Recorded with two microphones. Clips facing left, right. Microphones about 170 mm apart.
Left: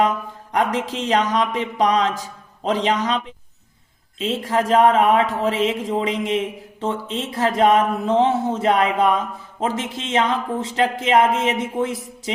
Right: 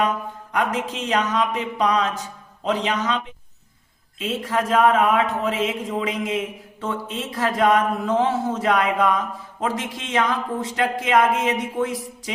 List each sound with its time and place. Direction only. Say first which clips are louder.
0.5 s music: left 3 dB; 35° left (ahead or behind)
4.2 s speech: left 3 dB; 30° left (ahead or behind)